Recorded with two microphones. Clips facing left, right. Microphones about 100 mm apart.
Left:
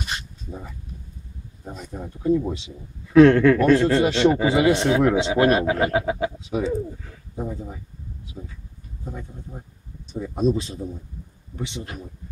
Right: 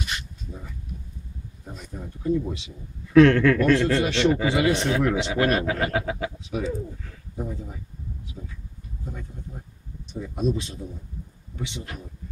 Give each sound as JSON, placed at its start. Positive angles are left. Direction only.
{"t": 0.1, "sound": "a sound", "side_deg": 35}
{"t": 1.8, "sound": "speech", "side_deg": 30}
{"t": 10.1, "sound": "speech", "side_deg": 35}